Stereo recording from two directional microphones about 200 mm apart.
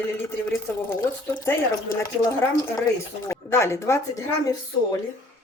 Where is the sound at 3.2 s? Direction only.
15° left (ahead or behind).